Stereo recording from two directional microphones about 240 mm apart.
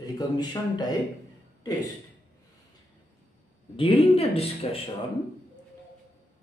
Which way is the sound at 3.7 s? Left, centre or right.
Left.